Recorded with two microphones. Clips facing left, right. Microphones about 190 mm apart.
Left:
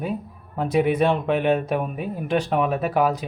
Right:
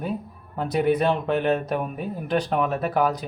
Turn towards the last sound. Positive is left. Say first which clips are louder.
# left 2 dB
turn(degrees=10)  # may be behind; listen again after turning